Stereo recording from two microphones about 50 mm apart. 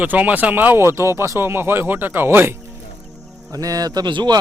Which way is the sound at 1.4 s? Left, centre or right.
Right.